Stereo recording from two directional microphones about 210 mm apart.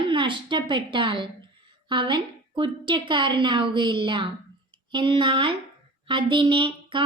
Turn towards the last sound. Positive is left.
turn(degrees=-25)  # may be behind; listen again after turning